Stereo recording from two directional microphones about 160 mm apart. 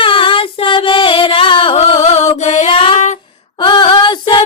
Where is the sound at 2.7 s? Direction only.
35° left (ahead or behind).